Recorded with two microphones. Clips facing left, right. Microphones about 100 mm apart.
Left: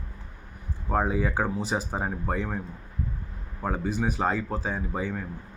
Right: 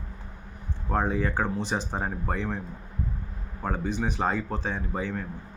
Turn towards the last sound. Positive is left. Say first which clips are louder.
# even
turn(degrees=5)  # may be behind; listen again after turning